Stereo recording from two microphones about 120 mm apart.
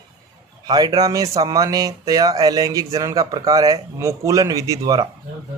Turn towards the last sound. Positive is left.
turn(degrees=-30)  # may be behind; listen again after turning